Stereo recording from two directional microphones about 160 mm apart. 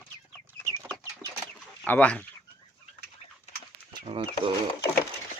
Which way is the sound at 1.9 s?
10° left (ahead or behind).